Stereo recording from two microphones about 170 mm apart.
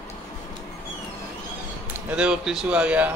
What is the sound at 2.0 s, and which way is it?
Speech, 5° right (ahead or behind).